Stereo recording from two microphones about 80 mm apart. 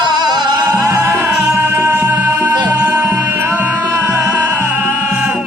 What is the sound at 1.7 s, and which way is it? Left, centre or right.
Music, right.